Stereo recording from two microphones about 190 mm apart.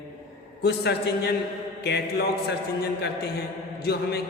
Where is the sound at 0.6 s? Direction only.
60° left (ahead or behind).